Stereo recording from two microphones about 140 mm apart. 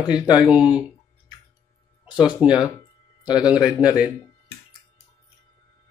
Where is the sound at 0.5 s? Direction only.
10° right (ahead or behind).